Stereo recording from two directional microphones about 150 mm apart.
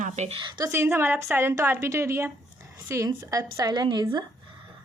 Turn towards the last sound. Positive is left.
turn(degrees=-30)  # may be behind; listen again after turning